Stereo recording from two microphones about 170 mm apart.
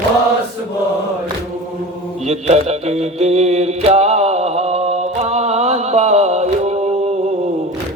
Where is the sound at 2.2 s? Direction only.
40° right (ahead or behind).